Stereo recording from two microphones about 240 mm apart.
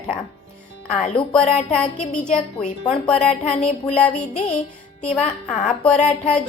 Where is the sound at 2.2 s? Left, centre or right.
Left.